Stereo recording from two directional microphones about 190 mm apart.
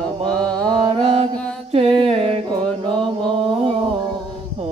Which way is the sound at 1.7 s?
30° right (ahead or behind).